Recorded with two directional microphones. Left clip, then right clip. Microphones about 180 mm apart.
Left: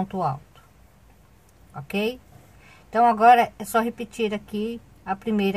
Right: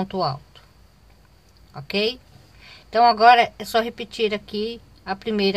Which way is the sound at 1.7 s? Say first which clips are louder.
Right 4 dB; 15° right (ahead or behind).